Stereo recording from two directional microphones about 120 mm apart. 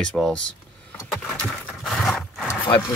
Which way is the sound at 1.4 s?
10° left (ahead or behind).